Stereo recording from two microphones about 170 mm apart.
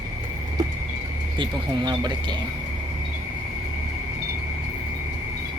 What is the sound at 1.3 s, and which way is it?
Speech, 25° right (ahead or behind).